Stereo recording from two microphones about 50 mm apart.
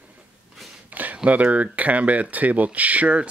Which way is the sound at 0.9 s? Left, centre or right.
Right.